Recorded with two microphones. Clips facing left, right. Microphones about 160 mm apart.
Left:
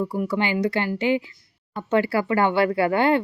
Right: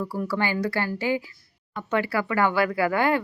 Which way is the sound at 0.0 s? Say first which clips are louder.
Left 3 dB; 20° left (ahead or behind).